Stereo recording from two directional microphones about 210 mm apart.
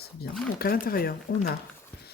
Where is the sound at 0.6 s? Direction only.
45° left (ahead or behind).